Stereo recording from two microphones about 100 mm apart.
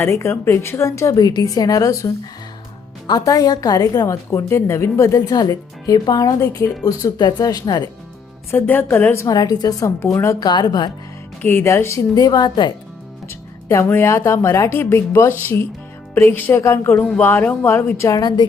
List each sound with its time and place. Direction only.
0.0 s speech: 25° left (ahead or behind)
1.2 s a woman's voice: 45° left (ahead or behind)
8.4 s speech: 20° left (ahead or behind)
9.2 s a woman's voice: 40° left (ahead or behind)
10.0 s speech: 25° left (ahead or behind)
10.4 s speech: 45° left (ahead or behind)
11.4 s speech: 25° left (ahead or behind)
12.1 s speech: 40° left (ahead or behind)
13.2 s music: 30° left (ahead or behind)
14.3 s speech: 30° left (ahead or behind)
18.2 s speech: 45° left (ahead or behind)